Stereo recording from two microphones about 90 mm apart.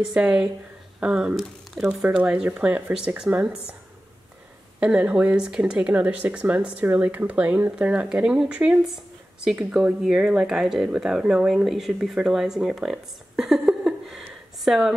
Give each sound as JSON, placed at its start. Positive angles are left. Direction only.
{"t": 0.1, "sound": "speech", "side_deg": -10}
{"t": 4.7, "sound": "speech", "side_deg": -15}